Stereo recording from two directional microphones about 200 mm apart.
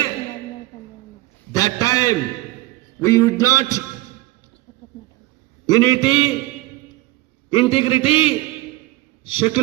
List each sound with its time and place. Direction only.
1.5 s a sound: 20° left (ahead or behind)
5.6 s a man's voice: 20° left (ahead or behind)
7.5 s a man's voice: 25° left (ahead or behind)